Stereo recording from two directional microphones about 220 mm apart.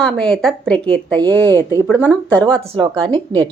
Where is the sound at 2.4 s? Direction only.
20° right (ahead or behind).